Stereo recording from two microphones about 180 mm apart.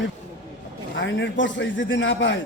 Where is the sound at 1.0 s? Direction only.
90° left.